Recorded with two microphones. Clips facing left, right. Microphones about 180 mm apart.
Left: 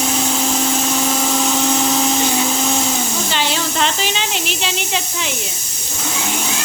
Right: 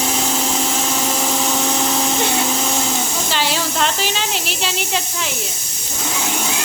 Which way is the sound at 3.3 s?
5° right (ahead or behind).